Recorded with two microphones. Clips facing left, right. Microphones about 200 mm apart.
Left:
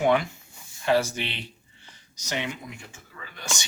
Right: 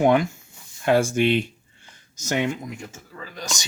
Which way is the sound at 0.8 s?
50° right (ahead or behind).